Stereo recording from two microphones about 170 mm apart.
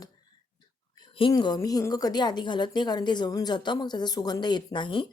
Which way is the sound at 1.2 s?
25° left (ahead or behind).